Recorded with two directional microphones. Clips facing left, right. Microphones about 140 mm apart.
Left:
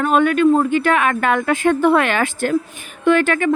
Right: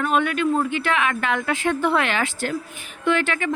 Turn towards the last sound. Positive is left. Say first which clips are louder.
# left 7 dB
turn(degrees=50)  # may be behind; listen again after turning